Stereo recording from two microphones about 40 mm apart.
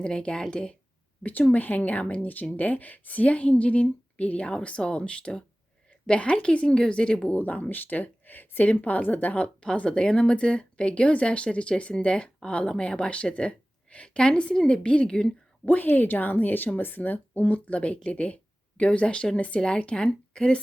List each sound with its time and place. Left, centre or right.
0.0 s speech: left
1.2 s speech: left
7.3 s speech: left
9.6 s speech: left
15.6 s speech: left
19.4 s speech: left